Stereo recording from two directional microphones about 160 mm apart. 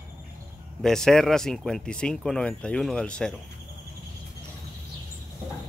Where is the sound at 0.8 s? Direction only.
5° left (ahead or behind).